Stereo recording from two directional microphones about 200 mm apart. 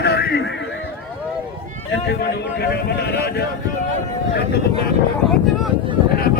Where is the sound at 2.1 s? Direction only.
55° left (ahead or behind).